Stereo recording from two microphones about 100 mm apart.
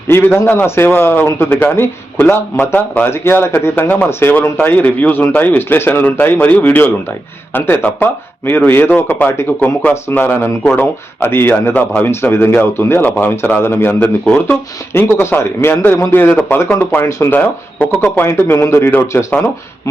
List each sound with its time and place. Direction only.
0.1 s a man's voice: 20° left (ahead or behind)